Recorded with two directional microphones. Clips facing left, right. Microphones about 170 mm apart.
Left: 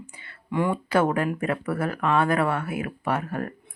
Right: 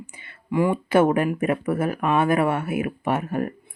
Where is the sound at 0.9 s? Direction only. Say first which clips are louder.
Right 4 dB; 20° right (ahead or behind).